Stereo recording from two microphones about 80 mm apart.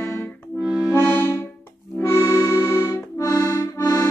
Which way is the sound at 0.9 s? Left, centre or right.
Left.